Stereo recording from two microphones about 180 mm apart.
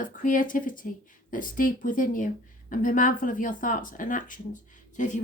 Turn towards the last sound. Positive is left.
turn(degrees=45)  # may be behind; listen again after turning